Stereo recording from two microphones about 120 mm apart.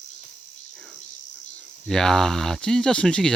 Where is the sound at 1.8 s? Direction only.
5° left (ahead or behind).